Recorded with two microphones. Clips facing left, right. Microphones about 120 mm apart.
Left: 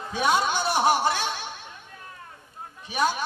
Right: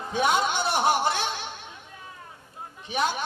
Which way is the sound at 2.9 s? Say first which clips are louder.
Left 1 dB; 20° right (ahead or behind).